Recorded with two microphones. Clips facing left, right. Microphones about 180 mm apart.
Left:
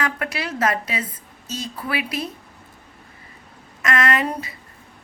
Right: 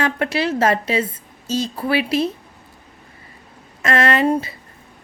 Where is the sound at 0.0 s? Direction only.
30° right (ahead or behind).